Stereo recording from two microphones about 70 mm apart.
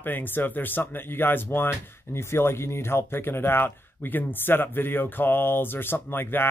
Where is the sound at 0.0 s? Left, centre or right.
Left.